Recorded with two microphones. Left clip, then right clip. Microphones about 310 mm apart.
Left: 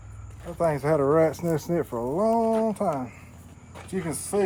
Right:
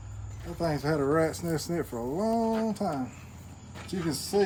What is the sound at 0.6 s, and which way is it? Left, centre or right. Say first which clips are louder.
Speech: left 6 dB; left.